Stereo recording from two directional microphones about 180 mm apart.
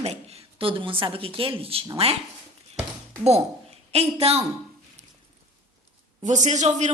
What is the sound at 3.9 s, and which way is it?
Speech, 35° right (ahead or behind).